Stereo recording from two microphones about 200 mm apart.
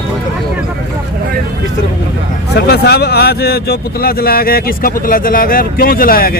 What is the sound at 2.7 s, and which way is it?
Speech, 55° left (ahead or behind).